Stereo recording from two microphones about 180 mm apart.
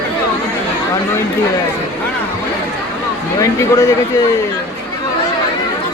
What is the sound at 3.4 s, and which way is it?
Speech, 20° left (ahead or behind).